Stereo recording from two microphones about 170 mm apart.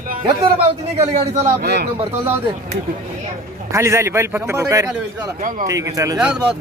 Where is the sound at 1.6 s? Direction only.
75° right (ahead or behind).